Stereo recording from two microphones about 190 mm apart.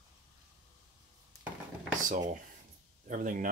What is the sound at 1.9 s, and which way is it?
Speech, 40° right (ahead or behind).